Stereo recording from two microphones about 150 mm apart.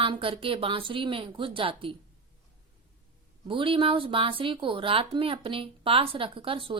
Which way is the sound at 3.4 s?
35° right (ahead or behind).